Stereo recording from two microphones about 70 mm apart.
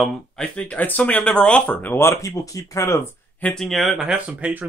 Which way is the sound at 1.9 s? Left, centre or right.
Left.